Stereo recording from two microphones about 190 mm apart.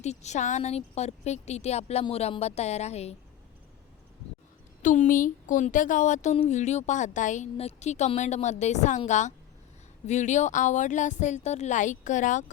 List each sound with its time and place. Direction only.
0.0 s speech: 35° left (ahead or behind)
4.8 s speech: 40° left (ahead or behind)